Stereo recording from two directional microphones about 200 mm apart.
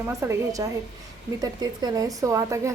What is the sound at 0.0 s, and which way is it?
Speech, 15° right (ahead or behind).